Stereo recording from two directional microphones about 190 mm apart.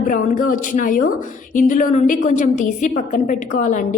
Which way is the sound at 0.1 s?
45° left (ahead or behind).